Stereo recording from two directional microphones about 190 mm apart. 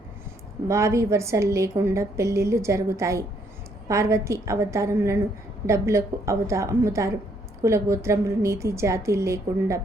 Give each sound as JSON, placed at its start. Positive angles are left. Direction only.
{"t": 0.7, "sound": "a woman's voice", "side_deg": -15}